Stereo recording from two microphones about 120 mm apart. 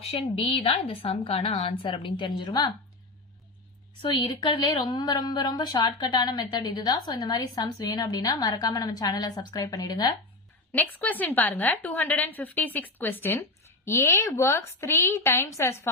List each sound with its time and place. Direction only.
0.0 s a woman's voice: 55° left (ahead or behind)
1.9 s a woman's voice: 40° left (ahead or behind)
4.0 s a woman's voice: 40° left (ahead or behind)
10.7 s a woman's voice: 15° left (ahead or behind)